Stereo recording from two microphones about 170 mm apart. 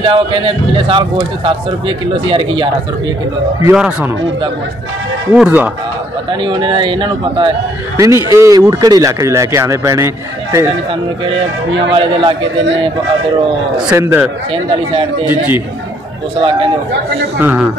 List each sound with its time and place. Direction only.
0.0 s speech: 30° right (ahead or behind)
3.7 s speech: 5° right (ahead or behind)
5.3 s a man's voice: 10° right (ahead or behind)
6.4 s speech: 25° right (ahead or behind)
8.3 s speech: 20° right (ahead or behind)
11.9 s speech: 25° right (ahead or behind)
13.9 s a man's voice: 15° right (ahead or behind)
16.3 s speech: 30° right (ahead or behind)
17.4 s a man's voice: 10° right (ahead or behind)